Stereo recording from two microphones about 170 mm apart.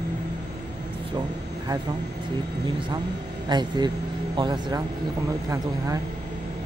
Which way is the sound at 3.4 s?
25° right (ahead or behind).